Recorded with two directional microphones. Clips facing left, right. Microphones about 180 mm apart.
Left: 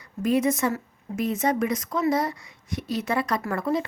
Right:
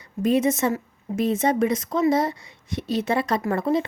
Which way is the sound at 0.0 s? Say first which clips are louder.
Right 2 dB; 25° right (ahead or behind).